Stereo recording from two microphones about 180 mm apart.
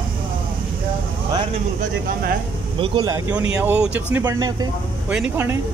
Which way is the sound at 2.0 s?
50° right (ahead or behind).